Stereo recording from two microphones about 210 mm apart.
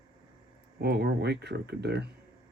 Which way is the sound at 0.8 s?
50° right (ahead or behind).